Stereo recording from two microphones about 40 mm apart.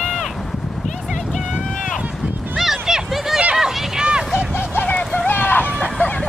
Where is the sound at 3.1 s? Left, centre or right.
Centre.